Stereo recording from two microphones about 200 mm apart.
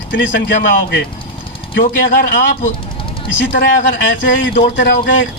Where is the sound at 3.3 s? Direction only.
65° left (ahead or behind).